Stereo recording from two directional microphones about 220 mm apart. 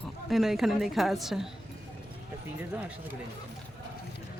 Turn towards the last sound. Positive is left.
turn(degrees=-10)  # may be behind; listen again after turning